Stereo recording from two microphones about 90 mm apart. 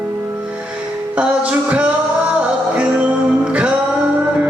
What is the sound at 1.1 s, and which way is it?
Music, 15° right (ahead or behind).